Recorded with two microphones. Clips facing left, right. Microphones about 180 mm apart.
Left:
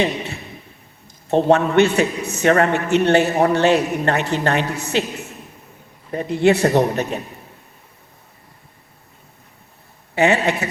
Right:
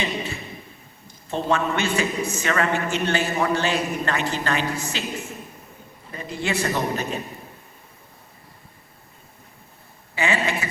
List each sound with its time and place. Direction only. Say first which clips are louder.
1.3 s a man's voice: left 8 dB; 65° left (ahead or behind)
6.1 s a man's voice: left 12 dB; 60° left (ahead or behind)
10.2 s a man's voice: left 7 dB; 65° left (ahead or behind)